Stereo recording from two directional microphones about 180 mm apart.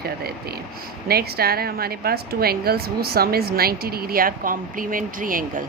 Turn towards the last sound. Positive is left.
turn(degrees=-50)  # may be behind; listen again after turning